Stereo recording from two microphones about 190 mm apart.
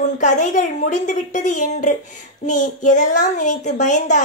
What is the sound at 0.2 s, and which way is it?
A woman's voice, 40° left (ahead or behind).